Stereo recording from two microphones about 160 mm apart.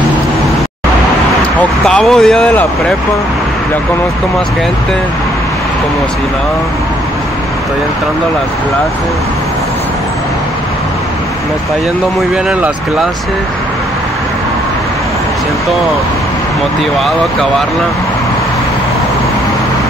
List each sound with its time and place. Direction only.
1.6 s speech: 5° left (ahead or behind)
12.4 s speech: 5° right (ahead or behind)